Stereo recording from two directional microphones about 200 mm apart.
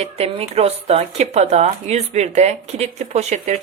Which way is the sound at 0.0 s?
30° right (ahead or behind).